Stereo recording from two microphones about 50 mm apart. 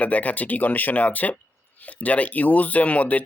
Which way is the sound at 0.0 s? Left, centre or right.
Left.